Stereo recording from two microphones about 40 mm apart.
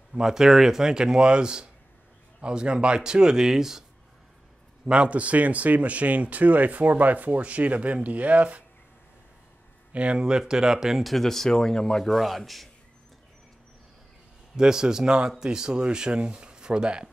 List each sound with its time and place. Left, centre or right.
0.1 s speech: centre
4.8 s speech: right
9.9 s speech: right
10.2 s speech: centre
11.1 s speech: centre
12.1 s a man's voice: centre
14.6 s speech: centre